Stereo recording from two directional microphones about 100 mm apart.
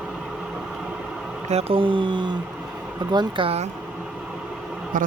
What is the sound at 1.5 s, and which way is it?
Speech, 80° right.